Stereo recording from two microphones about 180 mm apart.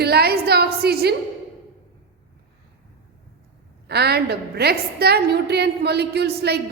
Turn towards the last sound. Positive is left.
turn(degrees=-65)  # may be behind; listen again after turning